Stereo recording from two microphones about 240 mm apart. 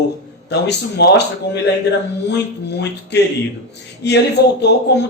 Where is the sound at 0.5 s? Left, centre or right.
Left.